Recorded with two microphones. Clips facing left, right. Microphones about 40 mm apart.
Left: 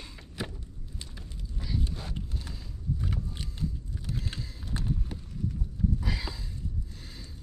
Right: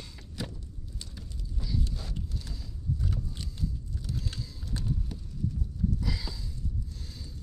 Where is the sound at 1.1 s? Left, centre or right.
Left.